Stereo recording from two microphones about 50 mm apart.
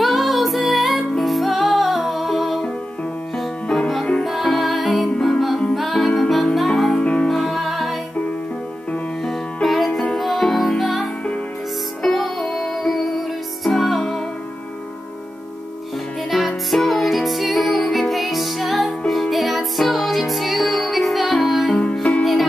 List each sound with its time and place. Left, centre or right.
0.0 s music: centre
3.6 s music: centre
6.9 s music: left
7.2 s music: centre
9.2 s music: centre
16.3 s music: centre